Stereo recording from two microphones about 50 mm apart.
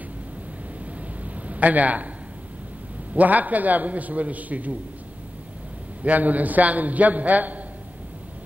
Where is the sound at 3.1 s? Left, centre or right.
Right.